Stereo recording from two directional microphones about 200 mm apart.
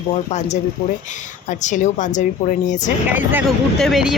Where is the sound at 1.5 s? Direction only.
40° left (ahead or behind).